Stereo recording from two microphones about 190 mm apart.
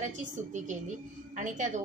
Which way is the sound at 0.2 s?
40° right (ahead or behind).